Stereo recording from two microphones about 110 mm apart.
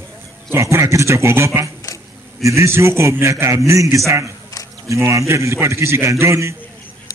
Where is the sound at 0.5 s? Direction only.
25° right (ahead or behind).